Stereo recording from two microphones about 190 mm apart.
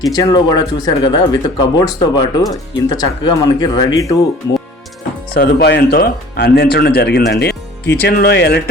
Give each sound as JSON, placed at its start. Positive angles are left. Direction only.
{"t": 0.0, "sound": "speech", "side_deg": 20}
{"t": 5.3, "sound": "speech", "side_deg": 55}